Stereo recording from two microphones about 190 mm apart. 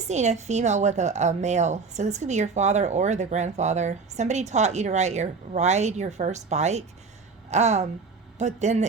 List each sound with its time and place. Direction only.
0.1 s a woman's voice: 35° right (ahead or behind)